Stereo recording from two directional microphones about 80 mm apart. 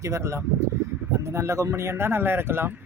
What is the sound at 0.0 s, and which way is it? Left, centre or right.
Speech, right.